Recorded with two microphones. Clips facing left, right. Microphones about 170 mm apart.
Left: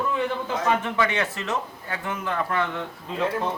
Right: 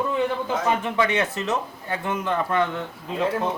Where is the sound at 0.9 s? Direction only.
20° right (ahead or behind).